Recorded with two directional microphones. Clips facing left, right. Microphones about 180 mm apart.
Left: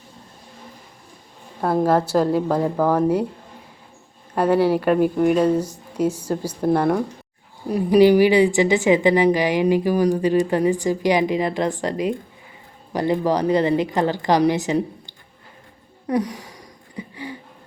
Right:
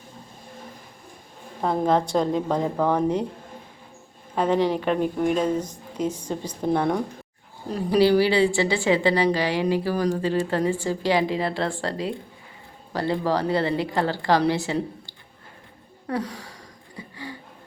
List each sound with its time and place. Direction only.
1.6 s speech: 5° left (ahead or behind)
4.4 s a woman's voice: 10° left (ahead or behind)
16.0 s a sound: 15° left (ahead or behind)